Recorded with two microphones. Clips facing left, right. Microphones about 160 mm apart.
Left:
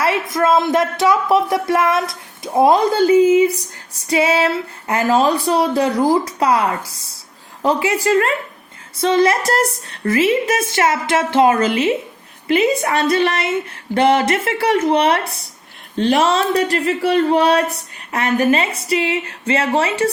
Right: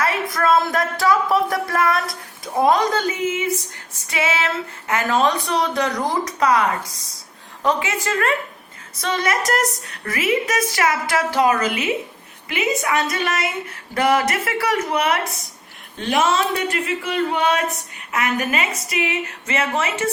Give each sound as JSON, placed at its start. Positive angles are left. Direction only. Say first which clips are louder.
{"t": 0.3, "sound": "a woman's voice", "louder": "left 3 dB", "side_deg": 20}